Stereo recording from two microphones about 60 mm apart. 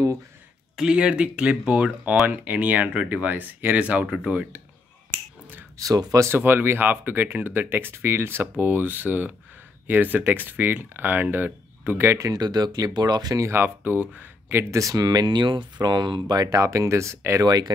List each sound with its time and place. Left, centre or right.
0.7 s speech: centre
5.8 s speech: right
6.2 s speech: right
8.5 s speech: right
12.2 s speech: right
13.5 s speech: right
14.7 s speech: right
15.8 s speech: right
16.3 s speech: right
17.4 s speech: right